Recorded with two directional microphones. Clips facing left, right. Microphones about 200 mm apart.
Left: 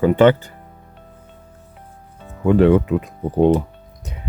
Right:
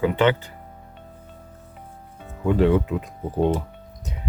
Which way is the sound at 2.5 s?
65° left (ahead or behind).